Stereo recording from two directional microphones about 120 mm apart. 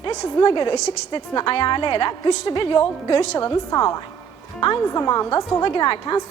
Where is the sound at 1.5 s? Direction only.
40° left (ahead or behind).